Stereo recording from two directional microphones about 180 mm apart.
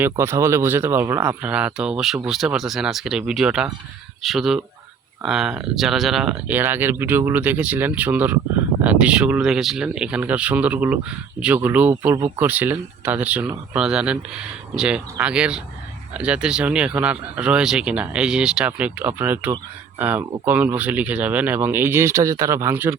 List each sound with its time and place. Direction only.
0.0 s speech: 15° right (ahead or behind)
12.1 s speech: 20° right (ahead or behind)
12.5 s speech: 10° right (ahead or behind)